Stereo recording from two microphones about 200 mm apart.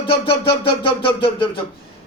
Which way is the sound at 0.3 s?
25° left (ahead or behind).